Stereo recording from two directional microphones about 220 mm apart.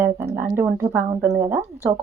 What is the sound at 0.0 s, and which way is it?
Speech, 10° right (ahead or behind).